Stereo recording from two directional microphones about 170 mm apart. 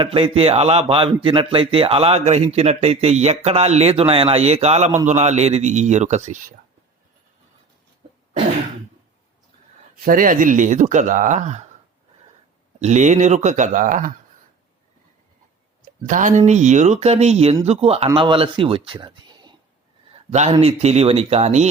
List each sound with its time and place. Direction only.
0.0 s speech: 35° right (ahead or behind)
9.9 s speech: 55° right (ahead or behind)
12.8 s speech: 45° right (ahead or behind)
16.0 s speech: 50° right (ahead or behind); by 19.5 s 25° right (ahead or behind)
20.3 s speech: 40° right (ahead or behind)